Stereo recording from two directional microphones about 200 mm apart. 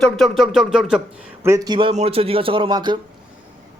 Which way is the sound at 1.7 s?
30° right (ahead or behind).